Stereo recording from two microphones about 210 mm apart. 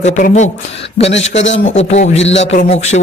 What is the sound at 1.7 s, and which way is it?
Speech, 30° left (ahead or behind).